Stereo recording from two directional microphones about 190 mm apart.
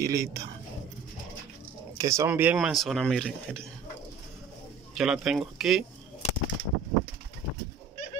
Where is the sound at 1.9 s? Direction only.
15° right (ahead or behind); by 3.5 s centre (ahead or behind).